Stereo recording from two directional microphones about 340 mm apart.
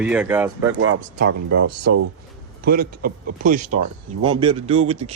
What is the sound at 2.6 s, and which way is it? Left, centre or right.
Speech, right.